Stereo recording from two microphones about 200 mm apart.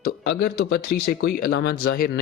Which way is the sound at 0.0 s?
50° left (ahead or behind).